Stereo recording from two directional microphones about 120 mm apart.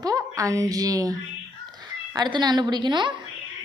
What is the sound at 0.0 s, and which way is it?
A woman's voice, 25° right (ahead or behind).